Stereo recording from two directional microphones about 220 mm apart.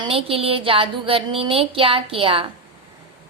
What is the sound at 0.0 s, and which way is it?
Speech, 25° right (ahead or behind).